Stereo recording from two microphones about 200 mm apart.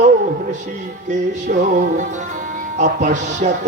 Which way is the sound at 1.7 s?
40° right (ahead or behind).